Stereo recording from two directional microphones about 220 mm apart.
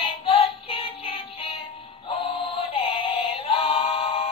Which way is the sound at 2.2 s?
25° left (ahead or behind).